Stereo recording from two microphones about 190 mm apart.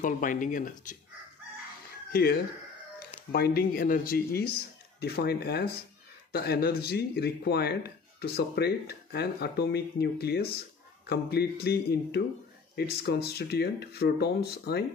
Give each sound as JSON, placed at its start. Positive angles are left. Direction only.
{"t": 0.0, "sound": "speech", "side_deg": 45}
{"t": 2.1, "sound": "speech", "side_deg": 50}